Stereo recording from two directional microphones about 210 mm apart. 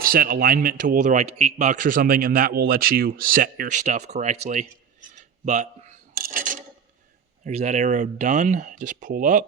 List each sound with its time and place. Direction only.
0.0 s speech: 45° right (ahead or behind)
5.0 s a sound: 35° right (ahead or behind)
6.1 s filing: 45° right (ahead or behind)
7.4 s speech: 30° right (ahead or behind)